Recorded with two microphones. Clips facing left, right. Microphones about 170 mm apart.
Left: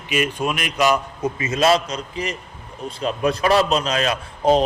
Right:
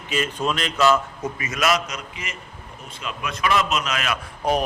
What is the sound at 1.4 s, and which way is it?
A man's voice, 30° left (ahead or behind).